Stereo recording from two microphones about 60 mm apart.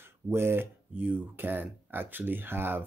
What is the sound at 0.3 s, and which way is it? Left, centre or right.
Speech, right.